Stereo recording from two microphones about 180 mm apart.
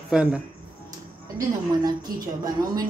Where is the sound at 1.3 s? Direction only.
20° right (ahead or behind).